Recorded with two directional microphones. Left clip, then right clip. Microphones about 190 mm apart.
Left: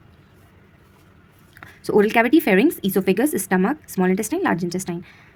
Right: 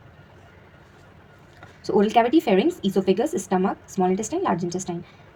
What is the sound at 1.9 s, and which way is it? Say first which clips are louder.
Speech: left 2 dB; 55° left (ahead or behind).